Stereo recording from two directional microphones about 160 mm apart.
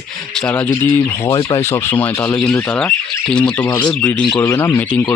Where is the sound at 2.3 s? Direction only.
5° left (ahead or behind).